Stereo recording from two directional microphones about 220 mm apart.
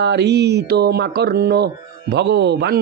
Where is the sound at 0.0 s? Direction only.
50° right (ahead or behind).